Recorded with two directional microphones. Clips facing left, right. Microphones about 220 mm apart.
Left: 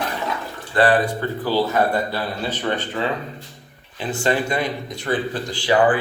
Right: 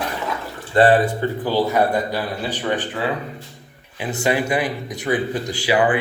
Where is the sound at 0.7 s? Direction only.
20° right (ahead or behind).